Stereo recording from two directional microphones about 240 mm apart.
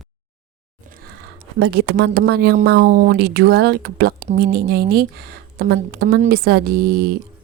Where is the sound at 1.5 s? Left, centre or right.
Right.